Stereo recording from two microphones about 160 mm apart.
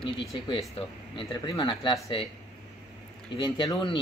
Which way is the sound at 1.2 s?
30° left (ahead or behind).